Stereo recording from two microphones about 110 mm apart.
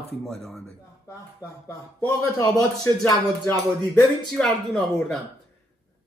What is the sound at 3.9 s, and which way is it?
Speech, 10° left (ahead or behind).